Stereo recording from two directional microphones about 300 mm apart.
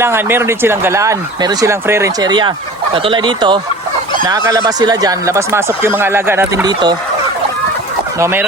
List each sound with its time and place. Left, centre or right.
0.0 s speech: centre
8.2 s speech: centre